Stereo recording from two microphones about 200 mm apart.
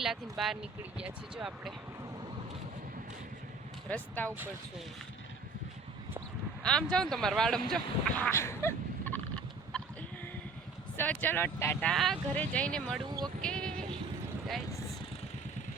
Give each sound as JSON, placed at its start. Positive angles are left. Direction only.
{"t": 0.0, "sound": "speech", "side_deg": 0}
{"t": 3.8, "sound": "speech", "side_deg": 10}
{"t": 6.6, "sound": "speech", "side_deg": 5}
{"t": 8.2, "sound": "fowl", "side_deg": 15}
{"t": 10.9, "sound": "speech", "side_deg": 10}
{"t": 13.0, "sound": "speech", "side_deg": -20}
{"t": 13.4, "sound": "speech", "side_deg": 5}